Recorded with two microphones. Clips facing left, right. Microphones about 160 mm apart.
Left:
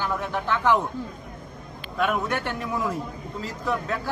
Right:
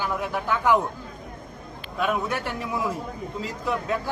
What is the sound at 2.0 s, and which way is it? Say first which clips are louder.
Speech: left 1 dB; 5° right (ahead or behind).